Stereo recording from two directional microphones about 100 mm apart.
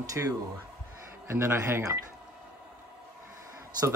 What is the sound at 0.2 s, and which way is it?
A man's voice, 20° right (ahead or behind).